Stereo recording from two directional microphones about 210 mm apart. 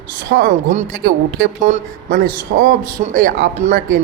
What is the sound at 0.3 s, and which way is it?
Speech, 50° right (ahead or behind).